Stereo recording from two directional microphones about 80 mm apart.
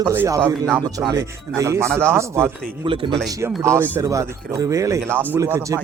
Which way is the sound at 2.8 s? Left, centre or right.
Right.